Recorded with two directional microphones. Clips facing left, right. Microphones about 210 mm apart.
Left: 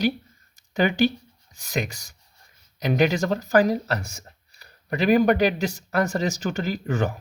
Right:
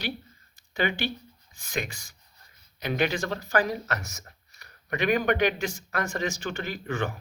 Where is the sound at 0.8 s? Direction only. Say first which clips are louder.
Left 8 dB; 40° left (ahead or behind).